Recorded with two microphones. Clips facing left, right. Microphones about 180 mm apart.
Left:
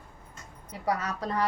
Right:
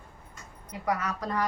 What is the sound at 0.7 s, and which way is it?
Speech, 30° left (ahead or behind).